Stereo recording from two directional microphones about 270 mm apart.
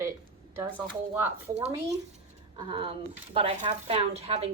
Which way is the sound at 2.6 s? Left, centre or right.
Centre.